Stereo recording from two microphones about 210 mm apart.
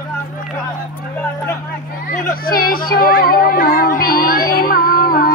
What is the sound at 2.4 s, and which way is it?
Music, 45° left (ahead or behind).